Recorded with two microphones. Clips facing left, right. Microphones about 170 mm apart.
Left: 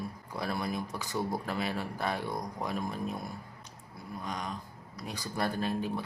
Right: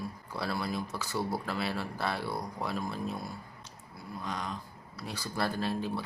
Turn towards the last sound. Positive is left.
turn(degrees=15)  # may be behind; listen again after turning